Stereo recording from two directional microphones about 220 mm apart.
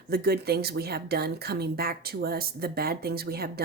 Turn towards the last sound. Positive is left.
turn(degrees=-45)  # may be behind; listen again after turning